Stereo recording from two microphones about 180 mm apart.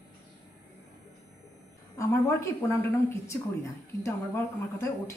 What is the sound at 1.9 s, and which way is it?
A man's voice, 15° left (ahead or behind).